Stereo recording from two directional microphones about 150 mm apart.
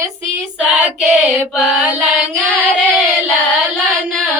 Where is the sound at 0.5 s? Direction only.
5° right (ahead or behind).